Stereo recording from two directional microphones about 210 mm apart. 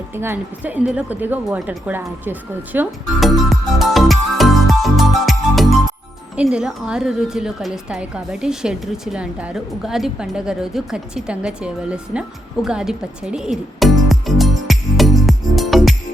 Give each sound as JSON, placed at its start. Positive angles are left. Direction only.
{"t": 0.1, "sound": "a woman's voice", "side_deg": -10}
{"t": 12.6, "sound": "music", "side_deg": -5}